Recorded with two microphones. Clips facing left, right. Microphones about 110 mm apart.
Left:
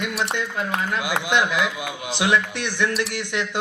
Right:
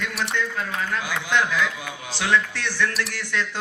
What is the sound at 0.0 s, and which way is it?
A man's voice, 25° left (ahead or behind).